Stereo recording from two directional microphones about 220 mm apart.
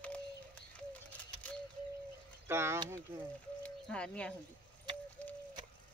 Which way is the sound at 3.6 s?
5° left (ahead or behind).